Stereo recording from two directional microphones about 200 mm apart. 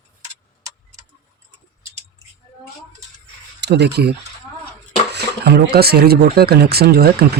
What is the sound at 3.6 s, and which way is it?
Speech, 55° right (ahead or behind).